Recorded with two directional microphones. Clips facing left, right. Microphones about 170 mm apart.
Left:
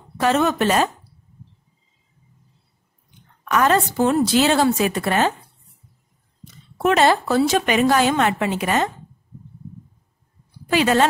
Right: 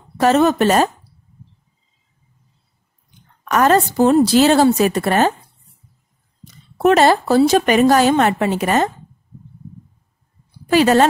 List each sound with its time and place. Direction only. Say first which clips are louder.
0.2 s speech: right 5 dB; 40° right (ahead or behind)
3.4 s speech: right 4 dB; 40° right (ahead or behind)
6.4 s speech: right 5 dB; 40° right (ahead or behind)
10.7 s speech: right 5 dB; 40° right (ahead or behind)